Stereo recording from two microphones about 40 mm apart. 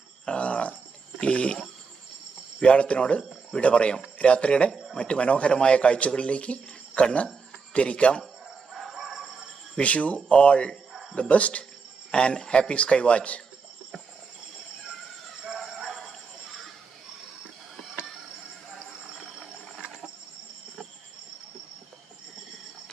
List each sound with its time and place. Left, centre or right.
0.3 s a sound: left
1.2 s a man's voice: left
2.6 s a man's voice: left
8.7 s music: centre
9.8 s a man's voice: left
15.5 s a sound: centre